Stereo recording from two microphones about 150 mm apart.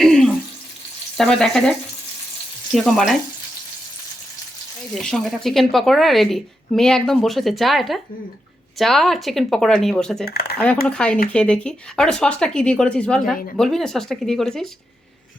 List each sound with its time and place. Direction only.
0.0 s water tap: 5° left (ahead or behind)
1.1 s speech: 5° left (ahead or behind)
2.7 s speech: centre (ahead or behind)
4.9 s speech: centre (ahead or behind)
10.2 s speech: 90° left
10.8 s speech: 5° left (ahead or behind)